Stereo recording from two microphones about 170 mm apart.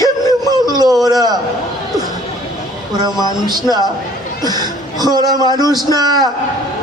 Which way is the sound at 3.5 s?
25° right (ahead or behind).